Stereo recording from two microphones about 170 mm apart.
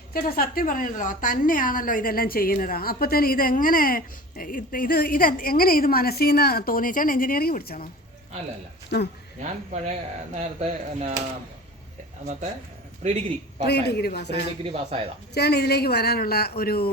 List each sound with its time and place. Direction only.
0.1 s a woman's voice: 60° left (ahead or behind)
8.9 s speech: 85° left
9.4 s speech: 45° right (ahead or behind)
12.2 s speech: 45° right (ahead or behind)
13.7 s speech: 75° left (ahead or behind)
14.6 s speech: 35° right (ahead or behind)
15.4 s speech: 70° left (ahead or behind)